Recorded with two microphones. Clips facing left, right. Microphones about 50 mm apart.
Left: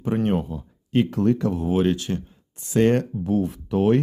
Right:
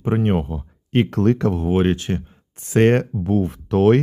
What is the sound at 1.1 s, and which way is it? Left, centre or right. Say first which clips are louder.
Speech: right 3 dB; right.